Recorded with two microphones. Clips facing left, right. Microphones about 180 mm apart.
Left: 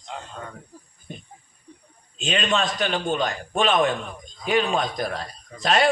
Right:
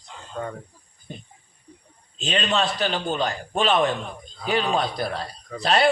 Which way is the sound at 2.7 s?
40° right (ahead or behind).